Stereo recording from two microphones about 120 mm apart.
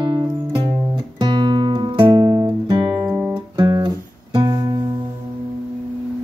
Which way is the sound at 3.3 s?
40° right (ahead or behind).